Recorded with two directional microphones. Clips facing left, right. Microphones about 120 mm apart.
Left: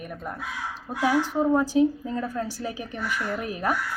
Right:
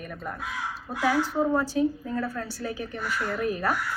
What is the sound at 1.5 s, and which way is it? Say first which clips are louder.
A woman's voice: left 4 dB; 15° left (ahead or behind).